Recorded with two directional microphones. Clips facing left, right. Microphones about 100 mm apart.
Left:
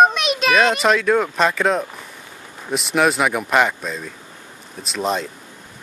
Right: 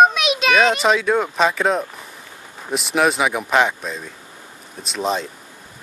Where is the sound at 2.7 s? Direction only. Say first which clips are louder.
Even; centre (ahead or behind).